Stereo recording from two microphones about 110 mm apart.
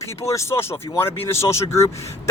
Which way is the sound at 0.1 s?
25° left (ahead or behind).